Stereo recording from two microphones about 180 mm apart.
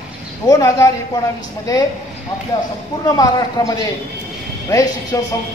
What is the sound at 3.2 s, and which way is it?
A man's voice, 20° left (ahead or behind).